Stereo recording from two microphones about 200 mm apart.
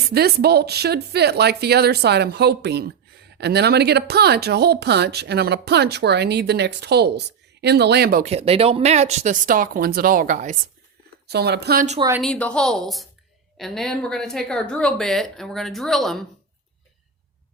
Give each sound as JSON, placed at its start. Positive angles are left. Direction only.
{"t": 0.0, "sound": "a woman's voice", "side_deg": -50}
{"t": 8.2, "sound": "speech", "side_deg": -30}
{"t": 11.3, "sound": "a woman's voice", "side_deg": -55}
{"t": 11.9, "sound": "speech", "side_deg": -15}
{"t": 12.2, "sound": "speech", "side_deg": 5}